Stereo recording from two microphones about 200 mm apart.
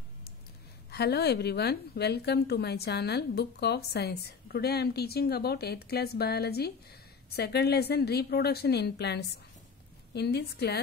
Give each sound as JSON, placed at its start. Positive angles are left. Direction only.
{"t": 0.8, "sound": "a woman's voice", "side_deg": 55}